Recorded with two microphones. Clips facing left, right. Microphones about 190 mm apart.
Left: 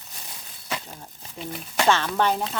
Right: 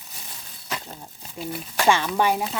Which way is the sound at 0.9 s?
5° right (ahead or behind).